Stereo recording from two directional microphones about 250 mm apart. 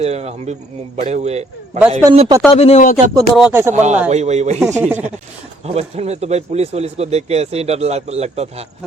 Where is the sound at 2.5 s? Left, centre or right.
Left.